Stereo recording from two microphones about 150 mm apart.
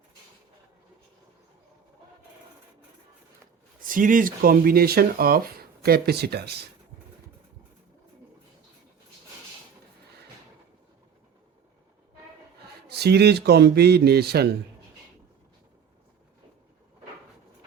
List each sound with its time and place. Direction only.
3.8 s speech: 65° right (ahead or behind); by 6.7 s 90° right
12.9 s a man's voice: 90° right